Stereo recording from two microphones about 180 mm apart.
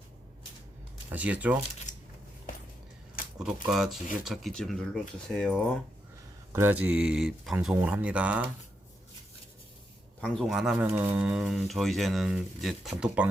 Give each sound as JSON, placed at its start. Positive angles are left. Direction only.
{"t": 1.1, "sound": "speech", "side_deg": -10}
{"t": 1.9, "sound": "a sound", "side_deg": 45}
{"t": 3.3, "sound": "speech", "side_deg": 0}
{"t": 6.5, "sound": "speech", "side_deg": -10}
{"t": 10.2, "sound": "speech", "side_deg": 5}